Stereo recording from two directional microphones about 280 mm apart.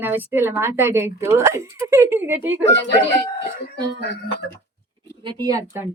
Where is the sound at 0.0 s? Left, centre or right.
Centre.